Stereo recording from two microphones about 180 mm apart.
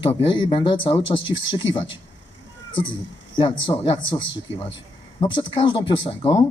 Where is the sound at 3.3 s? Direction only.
25° left (ahead or behind).